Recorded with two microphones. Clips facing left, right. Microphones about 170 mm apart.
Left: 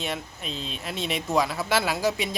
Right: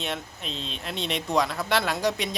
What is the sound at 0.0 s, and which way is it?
Speech, centre (ahead or behind).